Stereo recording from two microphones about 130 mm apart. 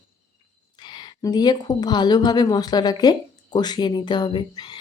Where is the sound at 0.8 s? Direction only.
35° left (ahead or behind).